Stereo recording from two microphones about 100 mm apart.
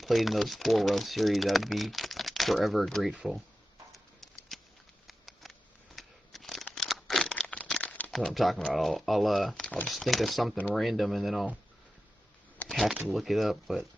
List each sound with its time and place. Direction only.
0.0 s speech: centre (ahead or behind)
3.9 s a sound: centre (ahead or behind)
8.1 s speech: centre (ahead or behind)
9.7 s speech: 15° left (ahead or behind)
9.9 s speech: centre (ahead or behind)
12.6 s a sound: centre (ahead or behind)
13.1 s speech: centre (ahead or behind)